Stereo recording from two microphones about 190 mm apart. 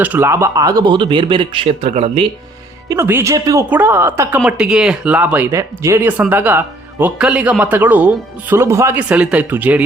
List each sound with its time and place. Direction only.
0.0 s speech: 10° right (ahead or behind); by 2.2 s 30° right (ahead or behind)
2.9 s speech: 15° right (ahead or behind)